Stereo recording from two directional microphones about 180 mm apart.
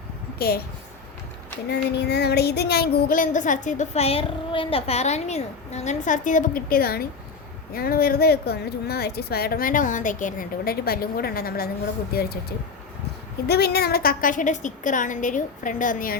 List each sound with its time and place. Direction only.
0.3 s a woman's voice: 60° left (ahead or behind)
1.7 s child singing: 70° left (ahead or behind)
7.7 s a woman's voice: 55° left (ahead or behind)
13.5 s child singing: 60° left (ahead or behind)